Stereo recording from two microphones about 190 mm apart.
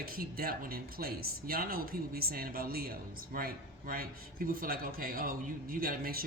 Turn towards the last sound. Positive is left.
turn(degrees=-50)  # may be behind; listen again after turning